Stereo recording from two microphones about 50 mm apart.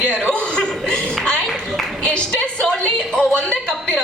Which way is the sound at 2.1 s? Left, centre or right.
Left.